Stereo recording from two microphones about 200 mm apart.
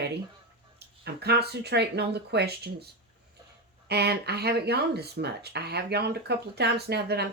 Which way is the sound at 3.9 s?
55° right (ahead or behind).